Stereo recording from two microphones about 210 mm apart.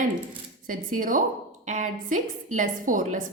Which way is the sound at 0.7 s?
40° right (ahead or behind).